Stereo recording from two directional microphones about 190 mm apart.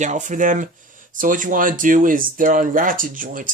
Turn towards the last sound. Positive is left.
turn(degrees=-45)  # may be behind; listen again after turning